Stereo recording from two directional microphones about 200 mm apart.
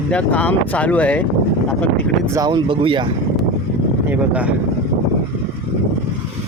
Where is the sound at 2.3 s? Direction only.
20° right (ahead or behind).